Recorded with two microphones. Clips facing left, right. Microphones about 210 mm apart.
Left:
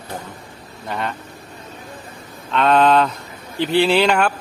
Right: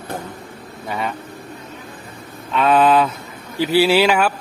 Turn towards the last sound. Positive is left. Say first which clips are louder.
# right 1 dB
turn(degrees=-5)  # may be behind; listen again after turning